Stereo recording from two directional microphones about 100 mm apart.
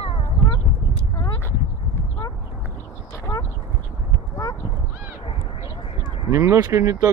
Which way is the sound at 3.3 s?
20° left (ahead or behind).